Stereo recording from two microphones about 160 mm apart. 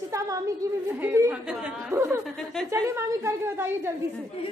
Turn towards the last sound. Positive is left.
turn(degrees=-15)  # may be behind; listen again after turning